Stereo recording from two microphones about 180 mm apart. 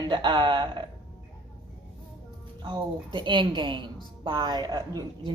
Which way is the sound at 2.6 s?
25° right (ahead or behind).